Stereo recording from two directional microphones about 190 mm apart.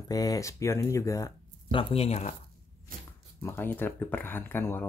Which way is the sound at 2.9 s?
50° right (ahead or behind).